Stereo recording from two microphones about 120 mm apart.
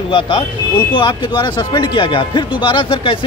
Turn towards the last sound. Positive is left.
turn(degrees=40)  # may be behind; listen again after turning